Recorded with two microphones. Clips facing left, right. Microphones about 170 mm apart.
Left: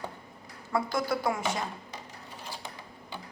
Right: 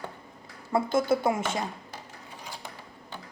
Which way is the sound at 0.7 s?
25° right (ahead or behind).